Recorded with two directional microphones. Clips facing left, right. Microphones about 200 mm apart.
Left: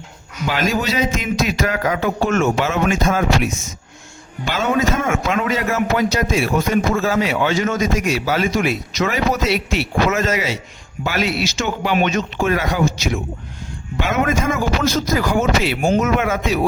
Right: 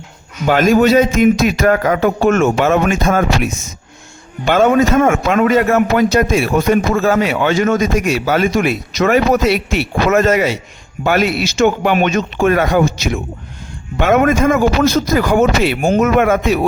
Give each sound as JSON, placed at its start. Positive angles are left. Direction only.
{"t": 0.4, "sound": "a man's voice", "side_deg": -55}